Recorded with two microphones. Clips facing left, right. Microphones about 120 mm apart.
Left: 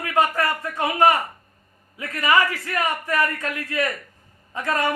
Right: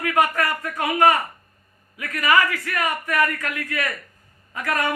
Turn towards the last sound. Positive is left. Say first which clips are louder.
# left 1 dB
turn(degrees=25)  # may be behind; listen again after turning